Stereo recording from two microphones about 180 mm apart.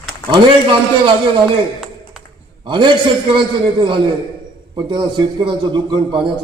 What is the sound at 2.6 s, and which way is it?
A man's voice, 25° right (ahead or behind).